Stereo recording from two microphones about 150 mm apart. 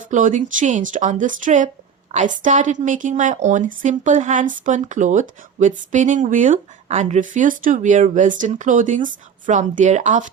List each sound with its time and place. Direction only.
0.1 s speech: 55° right (ahead or behind)